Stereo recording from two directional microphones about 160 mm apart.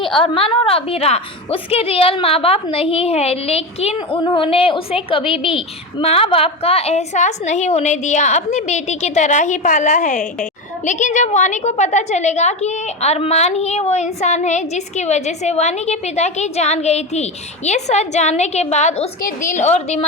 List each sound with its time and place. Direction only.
0.2 s a woman's voice: 35° left (ahead or behind)